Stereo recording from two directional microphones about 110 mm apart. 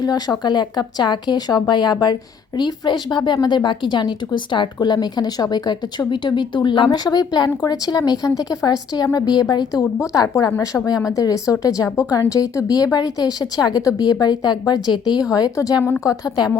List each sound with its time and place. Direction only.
0.0 s a woman's voice: 35° left (ahead or behind)